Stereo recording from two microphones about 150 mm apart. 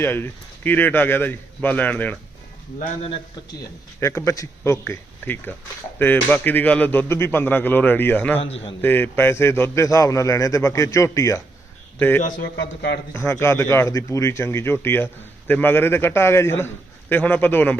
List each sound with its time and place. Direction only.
0.0 s speech: 15° left (ahead or behind)
3.6 s a man's voice: 20° left (ahead or behind)
8.4 s a man's voice: 40° left (ahead or behind)
8.8 s a man's voice: 15° left (ahead or behind)
12.4 s a man's voice: 90° left
13.1 s speech: 15° left (ahead or behind)